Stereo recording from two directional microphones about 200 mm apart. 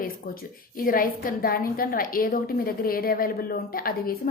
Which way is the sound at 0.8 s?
45° left (ahead or behind).